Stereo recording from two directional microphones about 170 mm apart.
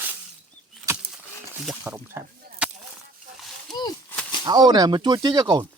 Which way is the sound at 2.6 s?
5° right (ahead or behind).